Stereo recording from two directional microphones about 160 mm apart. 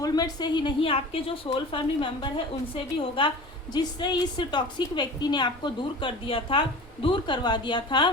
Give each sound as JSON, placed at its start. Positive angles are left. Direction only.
{"t": 0.0, "sound": "a woman's voice", "side_deg": 25}